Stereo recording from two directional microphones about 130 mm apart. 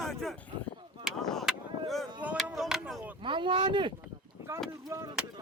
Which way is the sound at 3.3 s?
40° right (ahead or behind).